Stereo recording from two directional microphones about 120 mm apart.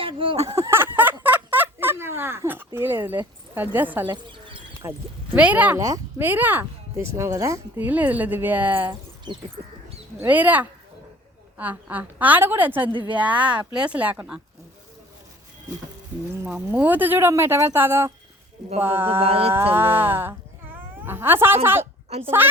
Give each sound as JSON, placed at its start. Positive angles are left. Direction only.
{"t": 0.0, "sound": "speech", "side_deg": -45}
{"t": 0.5, "sound": "a sound", "side_deg": -25}
{"t": 4.8, "sound": "speech", "side_deg": -25}
{"t": 5.4, "sound": "a woman's voice", "side_deg": -15}
{"t": 7.8, "sound": "a woman's voice", "side_deg": -15}
{"t": 10.2, "sound": "a woman's voice", "side_deg": -15}
{"t": 16.4, "sound": "speech", "side_deg": -20}
{"t": 19.2, "sound": "a sound", "side_deg": -55}
{"t": 19.5, "sound": "speech", "side_deg": -20}